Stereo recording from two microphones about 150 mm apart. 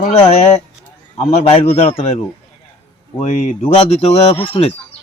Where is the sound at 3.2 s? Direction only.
50° left (ahead or behind).